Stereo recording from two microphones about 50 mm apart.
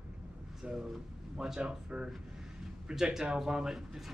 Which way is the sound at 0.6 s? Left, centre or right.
Centre.